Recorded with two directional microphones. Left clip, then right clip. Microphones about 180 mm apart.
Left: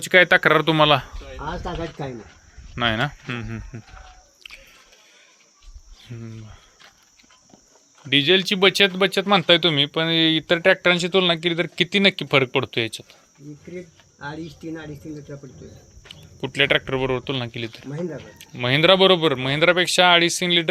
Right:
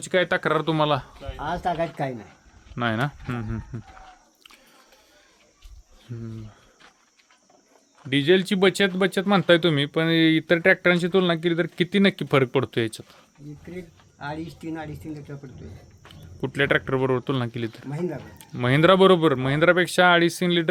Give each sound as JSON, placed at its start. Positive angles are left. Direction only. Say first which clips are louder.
{"t": 0.0, "sound": "speech", "louder": "left 8 dB", "side_deg": 10}
{"t": 2.7, "sound": "speech", "louder": "left 4 dB", "side_deg": -10}
{"t": 4.4, "sound": "squish", "louder": "left 9 dB", "side_deg": -20}
{"t": 6.1, "sound": "speech", "louder": "right 1 dB", "side_deg": -15}
{"t": 8.1, "sound": "speech", "louder": "left 3 dB", "side_deg": -25}
{"t": 16.4, "sound": "a man's voice", "louder": "left 3 dB", "side_deg": -30}